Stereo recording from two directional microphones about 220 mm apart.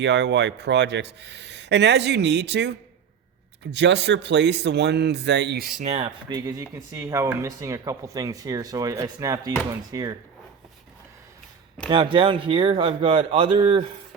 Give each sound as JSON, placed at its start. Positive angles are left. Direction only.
{"t": 0.0, "sound": "speech", "side_deg": -50}
{"t": 5.8, "sound": "speech", "side_deg": -30}
{"t": 6.2, "sound": "speech", "side_deg": -20}
{"t": 11.9, "sound": "speech", "side_deg": -25}